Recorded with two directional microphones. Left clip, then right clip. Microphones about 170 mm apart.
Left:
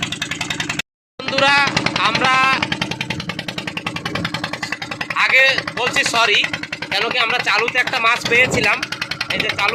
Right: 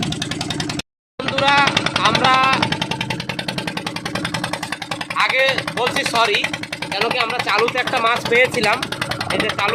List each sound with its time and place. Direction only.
1.4 s jackhammer: 5° right (ahead or behind)
1.7 s vehicle: 35° left (ahead or behind)
2.0 s speech: 5° right (ahead or behind)
5.1 s a sound: 5° right (ahead or behind)
6.0 s speech: centre (ahead or behind)